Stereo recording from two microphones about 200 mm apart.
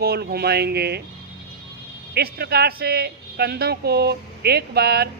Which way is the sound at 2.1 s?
55° right (ahead or behind).